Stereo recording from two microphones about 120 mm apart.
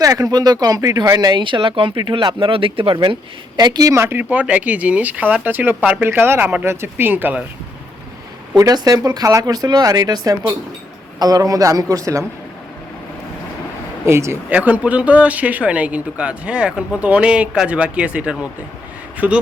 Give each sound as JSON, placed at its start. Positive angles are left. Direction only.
{"t": 0.0, "sound": "speech", "side_deg": -30}
{"t": 3.6, "sound": "speech", "side_deg": -35}
{"t": 8.5, "sound": "a man's voice", "side_deg": -30}
{"t": 14.0, "sound": "a man's voice", "side_deg": -25}